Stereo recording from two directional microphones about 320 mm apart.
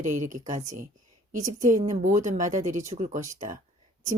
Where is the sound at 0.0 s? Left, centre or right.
Right.